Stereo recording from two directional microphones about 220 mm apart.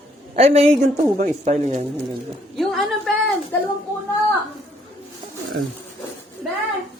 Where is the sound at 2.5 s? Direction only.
Centre (ahead or behind).